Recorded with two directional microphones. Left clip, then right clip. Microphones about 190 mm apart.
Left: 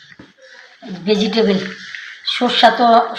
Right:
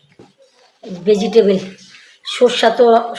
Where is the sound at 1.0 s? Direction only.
60° right (ahead or behind).